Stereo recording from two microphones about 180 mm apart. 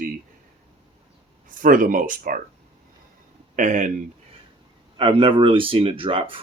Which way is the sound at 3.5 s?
45° right (ahead or behind).